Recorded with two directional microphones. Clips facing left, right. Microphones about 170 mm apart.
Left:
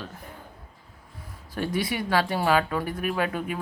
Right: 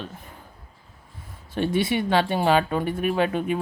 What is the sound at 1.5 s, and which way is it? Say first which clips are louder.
Speech: right 5 dB; 25° right (ahead or behind).